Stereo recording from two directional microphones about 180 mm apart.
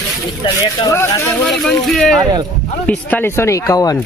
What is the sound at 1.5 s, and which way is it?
Speech, centre (ahead or behind).